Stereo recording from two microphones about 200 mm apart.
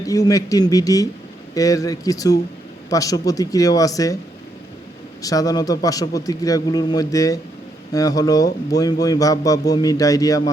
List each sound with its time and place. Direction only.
0.0 s speech: 15° left (ahead or behind)
5.2 s speech: 15° left (ahead or behind)